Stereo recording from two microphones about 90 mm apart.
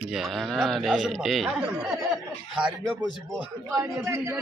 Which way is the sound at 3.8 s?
30° right (ahead or behind).